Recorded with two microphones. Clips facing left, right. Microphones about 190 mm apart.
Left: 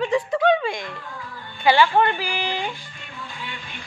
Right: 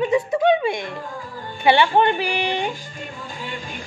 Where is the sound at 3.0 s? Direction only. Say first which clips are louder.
Right 4 dB; 45° right (ahead or behind).